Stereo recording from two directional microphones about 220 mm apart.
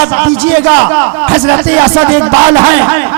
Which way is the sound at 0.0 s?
15° right (ahead or behind).